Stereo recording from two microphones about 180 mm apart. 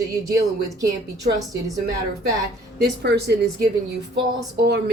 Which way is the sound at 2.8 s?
65° right (ahead or behind).